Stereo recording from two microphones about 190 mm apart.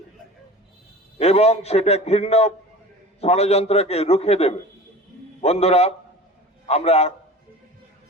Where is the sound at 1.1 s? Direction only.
35° left (ahead or behind).